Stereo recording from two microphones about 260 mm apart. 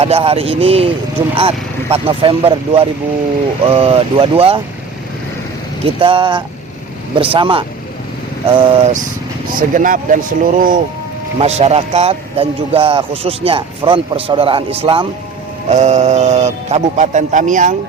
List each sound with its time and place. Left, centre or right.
0.0 s a man's voice: right
6.0 s a man's voice: centre